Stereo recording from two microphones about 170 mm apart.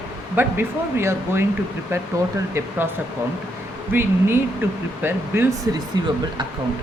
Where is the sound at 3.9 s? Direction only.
15° right (ahead or behind).